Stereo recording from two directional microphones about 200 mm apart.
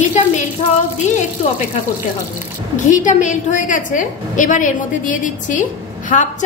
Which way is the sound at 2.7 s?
40° left (ahead or behind).